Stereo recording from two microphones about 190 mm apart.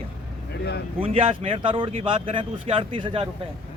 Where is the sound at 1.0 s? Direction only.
30° right (ahead or behind).